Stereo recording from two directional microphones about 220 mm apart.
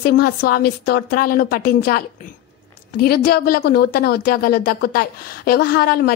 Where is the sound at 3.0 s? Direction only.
45° left (ahead or behind).